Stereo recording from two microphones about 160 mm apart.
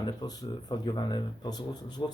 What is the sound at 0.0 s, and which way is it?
Speech, 25° left (ahead or behind).